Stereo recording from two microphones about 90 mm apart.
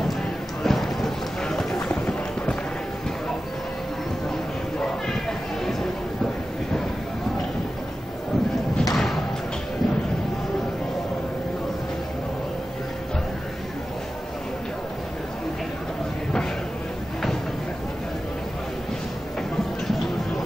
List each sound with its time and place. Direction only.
0.7 s run: centre (ahead or behind)
4.7 s a sound: 5° left (ahead or behind)
8.9 s thump: 5° left (ahead or behind)